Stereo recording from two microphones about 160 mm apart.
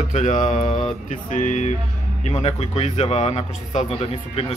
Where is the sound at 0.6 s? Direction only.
40° left (ahead or behind).